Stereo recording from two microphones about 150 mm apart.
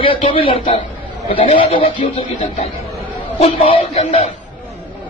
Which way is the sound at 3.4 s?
35° left (ahead or behind).